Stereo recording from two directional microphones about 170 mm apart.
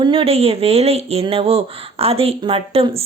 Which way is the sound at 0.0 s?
30° right (ahead or behind).